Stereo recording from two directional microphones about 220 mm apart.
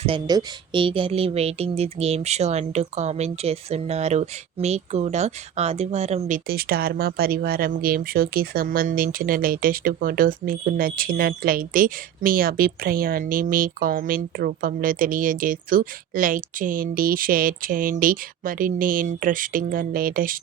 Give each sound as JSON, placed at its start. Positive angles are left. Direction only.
{"t": 0.0, "sound": "speech", "side_deg": -20}